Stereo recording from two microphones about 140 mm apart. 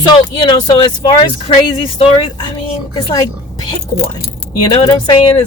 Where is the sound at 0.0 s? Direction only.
30° left (ahead or behind).